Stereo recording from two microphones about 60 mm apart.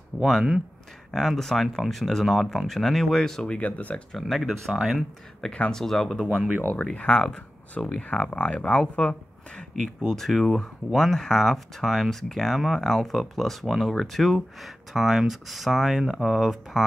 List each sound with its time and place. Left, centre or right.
0.2 s speech: centre
3.5 s speech: left
4.1 s speech: centre
6.6 s speech: left
10.0 s speech: centre